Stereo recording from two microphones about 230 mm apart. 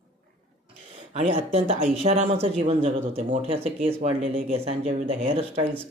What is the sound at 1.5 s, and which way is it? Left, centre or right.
Speech, right.